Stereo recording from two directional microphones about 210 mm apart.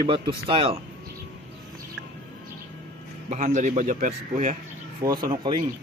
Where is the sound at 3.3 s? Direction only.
35° right (ahead or behind).